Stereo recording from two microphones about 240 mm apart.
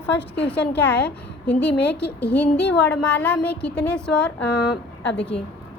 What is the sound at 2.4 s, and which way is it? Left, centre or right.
A woman's voice, centre.